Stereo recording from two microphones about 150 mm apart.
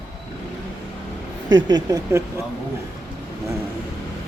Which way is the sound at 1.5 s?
30° right (ahead or behind).